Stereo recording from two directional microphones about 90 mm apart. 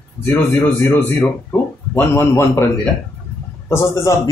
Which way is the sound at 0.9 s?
25° left (ahead or behind).